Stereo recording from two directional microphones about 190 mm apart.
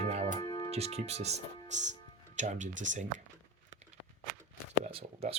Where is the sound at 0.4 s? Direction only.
20° left (ahead or behind).